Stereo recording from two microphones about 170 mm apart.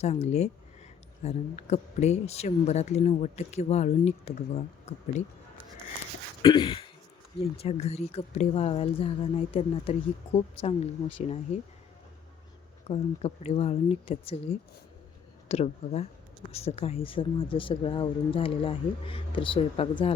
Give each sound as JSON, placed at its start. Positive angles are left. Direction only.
{"t": 0.0, "sound": "speech", "side_deg": 40}
{"t": 6.4, "sound": "a sound", "side_deg": 30}
{"t": 7.5, "sound": "speech", "side_deg": 35}
{"t": 12.9, "sound": "speech", "side_deg": 40}